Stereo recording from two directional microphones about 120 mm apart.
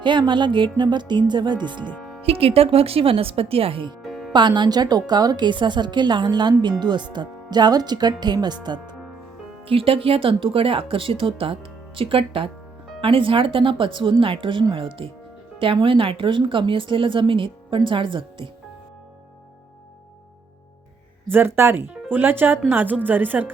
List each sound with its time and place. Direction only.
0.0 s a woman's voice: 40° right (ahead or behind)
2.2 s speech: 55° right (ahead or behind)
4.0 s music: centre (ahead or behind)
4.3 s a woman's voice: 40° right (ahead or behind)
9.6 s speech: 50° right (ahead or behind)
21.2 s speech: 20° right (ahead or behind)